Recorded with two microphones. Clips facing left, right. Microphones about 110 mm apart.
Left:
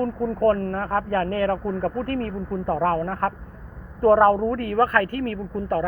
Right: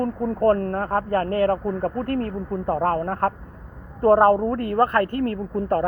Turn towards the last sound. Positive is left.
turn(degrees=-40)  # may be behind; listen again after turning